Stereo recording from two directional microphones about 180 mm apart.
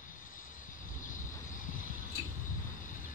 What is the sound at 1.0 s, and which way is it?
Vehicle, 45° left (ahead or behind).